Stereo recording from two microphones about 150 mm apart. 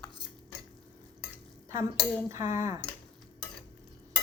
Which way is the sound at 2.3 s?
20° right (ahead or behind).